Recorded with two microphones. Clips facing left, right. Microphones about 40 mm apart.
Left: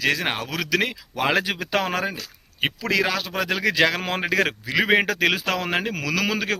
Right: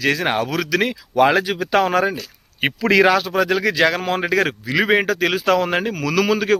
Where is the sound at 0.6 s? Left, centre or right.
Centre.